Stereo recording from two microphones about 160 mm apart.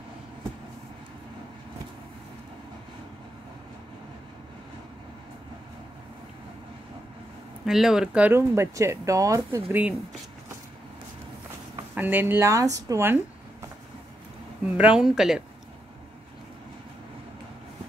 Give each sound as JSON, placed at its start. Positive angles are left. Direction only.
{"t": 7.6, "sound": "speech", "side_deg": 0}
{"t": 11.9, "sound": "speech", "side_deg": -10}
{"t": 14.8, "sound": "speech", "side_deg": -5}